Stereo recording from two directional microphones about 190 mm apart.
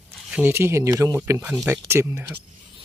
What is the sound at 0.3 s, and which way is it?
Speech, 10° right (ahead or behind).